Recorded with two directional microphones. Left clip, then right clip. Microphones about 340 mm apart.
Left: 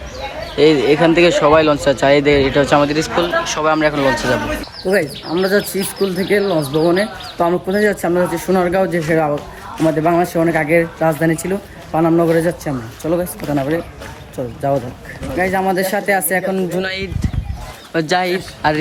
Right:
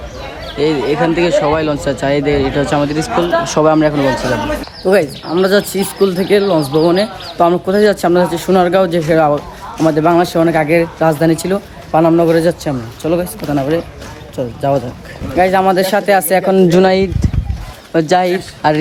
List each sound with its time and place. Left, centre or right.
0.5 s speech: centre
16.5 s speech: right
16.8 s speech: centre